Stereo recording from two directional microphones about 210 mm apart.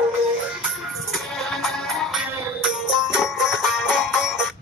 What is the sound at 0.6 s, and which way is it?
Music, centre (ahead or behind).